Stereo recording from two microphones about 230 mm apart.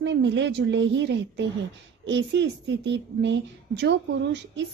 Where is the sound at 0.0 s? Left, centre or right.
Right.